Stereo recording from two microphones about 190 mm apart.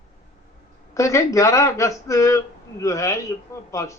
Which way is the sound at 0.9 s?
15° left (ahead or behind).